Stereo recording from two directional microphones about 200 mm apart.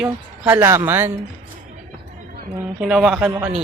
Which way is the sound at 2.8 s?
5° right (ahead or behind).